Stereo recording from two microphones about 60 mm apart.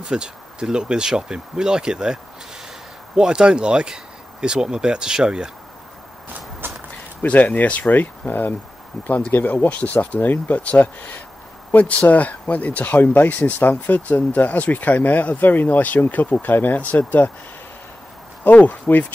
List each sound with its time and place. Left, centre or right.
0.0 s speech: centre
3.2 s speech: centre
6.6 s a sound: right
7.2 s speech: left
18.4 s speech: left